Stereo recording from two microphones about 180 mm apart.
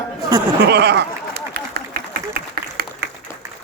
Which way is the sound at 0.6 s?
65° right (ahead or behind).